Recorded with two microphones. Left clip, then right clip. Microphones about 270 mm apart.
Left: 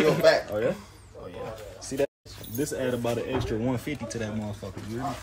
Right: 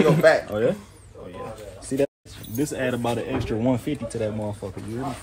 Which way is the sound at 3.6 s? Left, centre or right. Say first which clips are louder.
Right 6 dB; centre.